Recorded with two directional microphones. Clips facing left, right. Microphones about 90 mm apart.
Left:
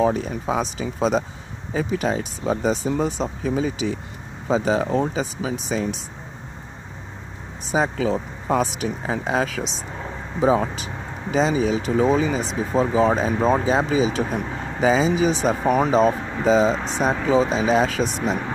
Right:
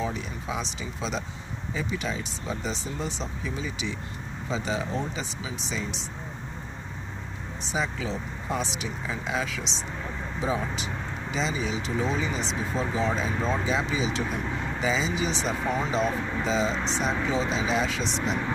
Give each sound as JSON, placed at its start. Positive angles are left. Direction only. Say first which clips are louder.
{"t": 0.0, "sound": "speech", "louder": "left 11 dB", "side_deg": 50}
{"t": 7.6, "sound": "speech", "louder": "left 9 dB", "side_deg": 45}
{"t": 8.8, "sound": "speech", "louder": "left 8 dB", "side_deg": 60}
{"t": 9.2, "sound": "speech", "louder": "left 7 dB", "side_deg": 50}
{"t": 11.7, "sound": "speech", "louder": "left 9 dB", "side_deg": 50}
{"t": 16.0, "sound": "speech", "louder": "left 8 dB", "side_deg": 45}